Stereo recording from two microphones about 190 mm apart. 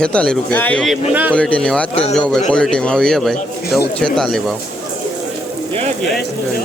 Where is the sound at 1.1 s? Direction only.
10° right (ahead or behind).